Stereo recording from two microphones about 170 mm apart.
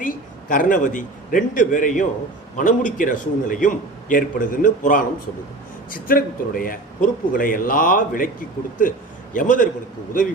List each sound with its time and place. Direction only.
0.0 s a man's voice: 50° left (ahead or behind)